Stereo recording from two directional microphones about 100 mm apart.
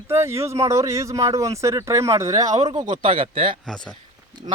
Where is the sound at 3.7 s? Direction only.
5° left (ahead or behind).